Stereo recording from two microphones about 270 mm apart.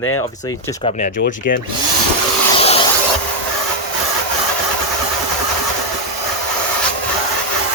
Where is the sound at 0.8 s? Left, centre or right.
Left.